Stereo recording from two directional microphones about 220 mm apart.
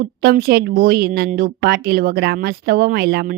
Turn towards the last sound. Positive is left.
turn(degrees=-45)  # may be behind; listen again after turning